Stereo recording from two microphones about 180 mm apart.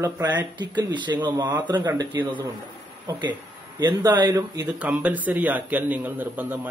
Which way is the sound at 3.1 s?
25° right (ahead or behind).